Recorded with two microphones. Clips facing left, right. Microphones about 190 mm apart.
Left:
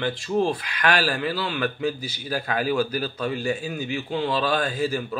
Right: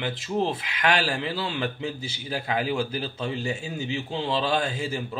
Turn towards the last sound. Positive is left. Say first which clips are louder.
# left 3 dB
turn(degrees=-25)  # may be behind; listen again after turning